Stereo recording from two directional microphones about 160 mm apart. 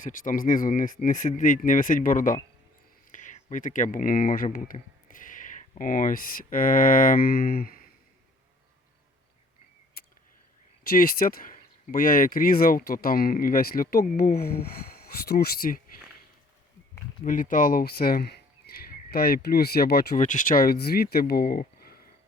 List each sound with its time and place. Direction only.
0.0 s speech: 55° left (ahead or behind)
10.8 s speech: 65° left (ahead or behind)
17.2 s speech: 55° left (ahead or behind); by 20.1 s 75° left (ahead or behind)
20.1 s speech: 55° left (ahead or behind); by 22.0 s 70° left (ahead or behind)